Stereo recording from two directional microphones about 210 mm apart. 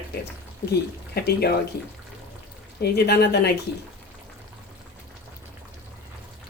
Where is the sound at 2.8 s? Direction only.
50° left (ahead or behind).